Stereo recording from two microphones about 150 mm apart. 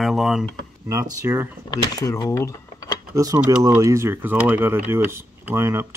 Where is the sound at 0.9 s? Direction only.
20° right (ahead or behind).